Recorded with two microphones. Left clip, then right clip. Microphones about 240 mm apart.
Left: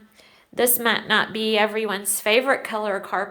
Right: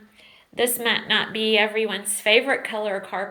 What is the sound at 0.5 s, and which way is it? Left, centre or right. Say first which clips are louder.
Speech: left 2 dB; left.